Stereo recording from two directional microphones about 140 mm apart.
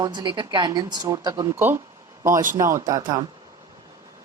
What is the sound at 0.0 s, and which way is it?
Speech, 30° right (ahead or behind).